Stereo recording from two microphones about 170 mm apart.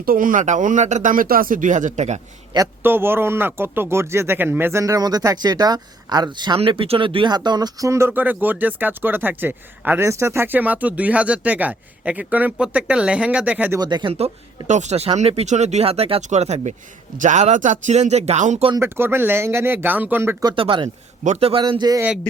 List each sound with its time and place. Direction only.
0.0 s speech: 55° right (ahead or behind)
2.8 s speech: 15° right (ahead or behind)
13.7 s speech: 25° right (ahead or behind)
14.7 s speech: 40° right (ahead or behind)
18.8 s speech: 15° right (ahead or behind)
20.4 s speech: 25° right (ahead or behind)
21.6 s speech: 25° right (ahead or behind)